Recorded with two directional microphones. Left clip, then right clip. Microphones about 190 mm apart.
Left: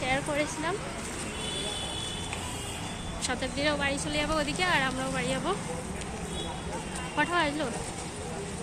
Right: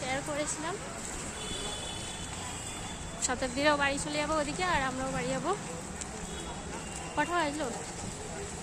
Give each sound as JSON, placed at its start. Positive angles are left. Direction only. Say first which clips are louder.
{"t": 0.0, "sound": "a sound", "louder": "left 5 dB", "side_deg": 0}
{"t": 3.2, "sound": "speech", "louder": "right 1 dB", "side_deg": -35}
{"t": 7.2, "sound": "speech", "louder": "left 3 dB", "side_deg": -15}